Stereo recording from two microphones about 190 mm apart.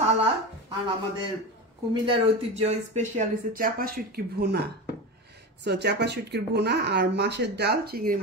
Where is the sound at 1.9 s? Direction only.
30° right (ahead or behind).